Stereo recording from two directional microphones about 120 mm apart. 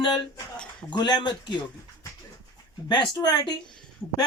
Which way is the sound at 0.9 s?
35° left (ahead or behind).